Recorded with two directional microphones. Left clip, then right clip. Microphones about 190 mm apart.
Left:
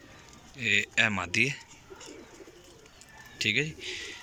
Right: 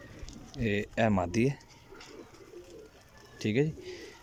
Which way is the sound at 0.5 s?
35° right (ahead or behind).